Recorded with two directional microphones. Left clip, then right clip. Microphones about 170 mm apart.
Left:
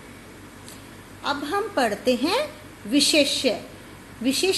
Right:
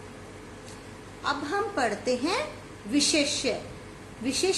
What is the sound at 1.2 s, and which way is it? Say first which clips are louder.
A woman's voice: left 3 dB; 60° left (ahead or behind).